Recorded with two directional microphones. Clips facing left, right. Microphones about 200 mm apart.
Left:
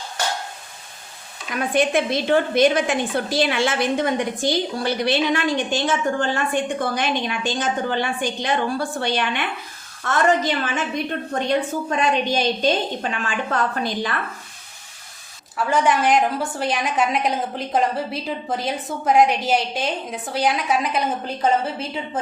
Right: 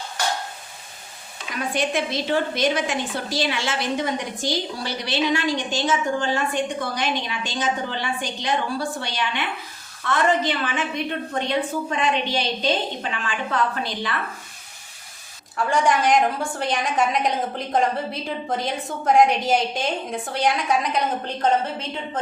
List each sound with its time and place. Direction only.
1.7 s a woman's voice: 55° left (ahead or behind)
10.0 s a woman's voice: 45° left (ahead or behind)
15.5 s a woman's voice: 5° left (ahead or behind)